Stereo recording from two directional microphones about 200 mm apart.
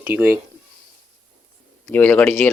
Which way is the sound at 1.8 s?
5° left (ahead or behind).